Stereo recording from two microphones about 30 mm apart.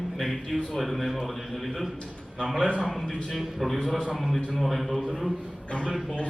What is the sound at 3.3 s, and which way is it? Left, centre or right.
A man's voice, centre.